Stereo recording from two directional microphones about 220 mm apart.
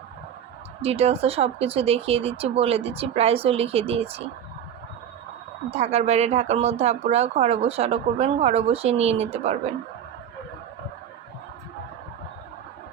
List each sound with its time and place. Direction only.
0.8 s speech: 30° right (ahead or behind)
5.7 s speech: 30° right (ahead or behind)